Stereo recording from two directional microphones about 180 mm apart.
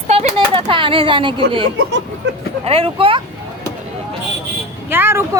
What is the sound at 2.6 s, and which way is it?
Speech, 30° right (ahead or behind).